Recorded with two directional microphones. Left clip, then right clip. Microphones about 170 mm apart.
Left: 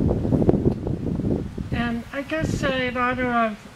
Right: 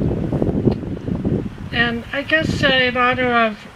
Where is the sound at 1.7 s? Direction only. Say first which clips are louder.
Right 9 dB; 25° right (ahead or behind).